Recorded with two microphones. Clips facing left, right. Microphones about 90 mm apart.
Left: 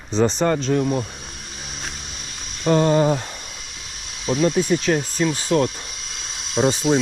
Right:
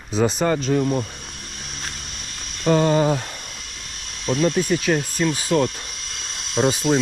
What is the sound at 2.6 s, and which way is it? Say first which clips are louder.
Speech: left 1 dB; centre (ahead or behind).